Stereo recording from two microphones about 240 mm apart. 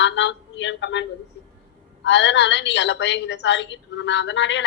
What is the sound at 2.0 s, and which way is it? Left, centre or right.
Speech, left.